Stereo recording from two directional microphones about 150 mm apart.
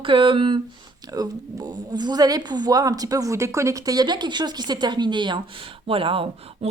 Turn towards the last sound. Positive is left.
turn(degrees=-40)  # may be behind; listen again after turning